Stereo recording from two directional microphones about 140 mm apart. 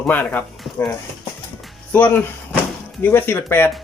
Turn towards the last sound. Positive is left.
turn(degrees=15)  # may be behind; listen again after turning